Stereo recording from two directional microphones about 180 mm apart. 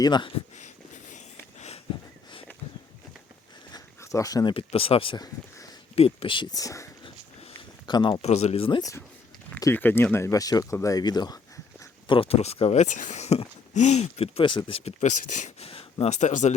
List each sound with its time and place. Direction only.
0.0 s speech: 25° left (ahead or behind)
0.5 s a sound: 40° left (ahead or behind)
3.7 s a sound: 20° left (ahead or behind)
4.5 s speech: 30° left (ahead or behind)
6.0 s speech: 35° left (ahead or behind)
9.6 s speech: 15° left (ahead or behind); by 16.6 s 40° left (ahead or behind)